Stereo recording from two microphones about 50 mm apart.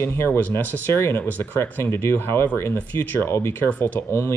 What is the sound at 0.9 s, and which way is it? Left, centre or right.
Speech, left.